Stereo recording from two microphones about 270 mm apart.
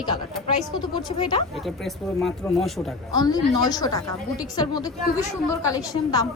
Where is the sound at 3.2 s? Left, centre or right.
Centre.